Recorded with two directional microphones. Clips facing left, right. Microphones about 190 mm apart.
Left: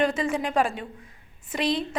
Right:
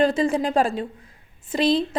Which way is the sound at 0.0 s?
30° right (ahead or behind).